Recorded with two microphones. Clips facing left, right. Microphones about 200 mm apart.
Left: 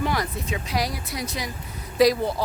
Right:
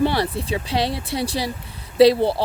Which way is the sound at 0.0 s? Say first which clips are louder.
Right 6 dB; 30° right (ahead or behind).